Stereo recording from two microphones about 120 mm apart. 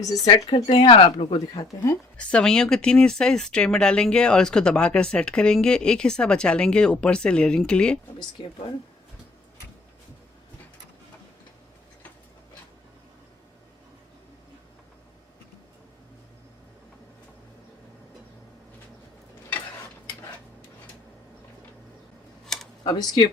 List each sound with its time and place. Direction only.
0.0 s speech: 30° left (ahead or behind)
0.7 s speech: 50° left (ahead or behind)
2.1 s speech: 5° left (ahead or behind)
8.2 s speech: 40° left (ahead or behind)
22.8 s speech: 35° left (ahead or behind)